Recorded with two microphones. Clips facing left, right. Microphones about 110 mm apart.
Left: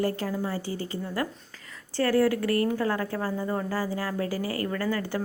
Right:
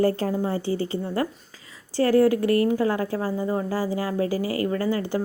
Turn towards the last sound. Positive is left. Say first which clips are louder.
# right 4 dB
turn(degrees=-15)  # may be behind; listen again after turning